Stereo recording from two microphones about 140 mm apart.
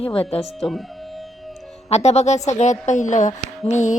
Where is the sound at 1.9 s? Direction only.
50° left (ahead or behind).